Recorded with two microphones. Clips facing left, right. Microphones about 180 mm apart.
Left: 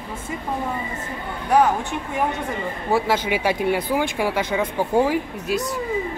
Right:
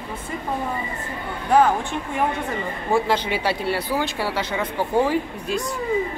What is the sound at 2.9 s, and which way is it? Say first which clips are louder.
Speech: even; 10° left (ahead or behind).